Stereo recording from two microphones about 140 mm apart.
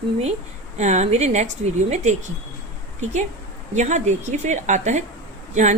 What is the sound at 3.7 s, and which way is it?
A woman's voice, 55° right (ahead or behind).